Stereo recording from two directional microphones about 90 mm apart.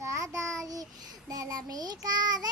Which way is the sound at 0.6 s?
45° right (ahead or behind).